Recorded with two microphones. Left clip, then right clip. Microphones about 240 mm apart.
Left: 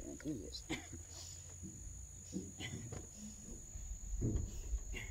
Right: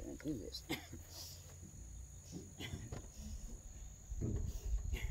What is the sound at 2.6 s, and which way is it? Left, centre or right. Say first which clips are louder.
Cricket: left 2 dB; right.